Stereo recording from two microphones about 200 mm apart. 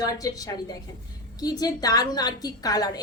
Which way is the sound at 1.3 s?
20° left (ahead or behind).